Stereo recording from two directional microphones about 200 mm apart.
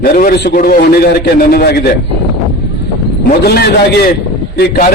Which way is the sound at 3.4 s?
55° left (ahead or behind).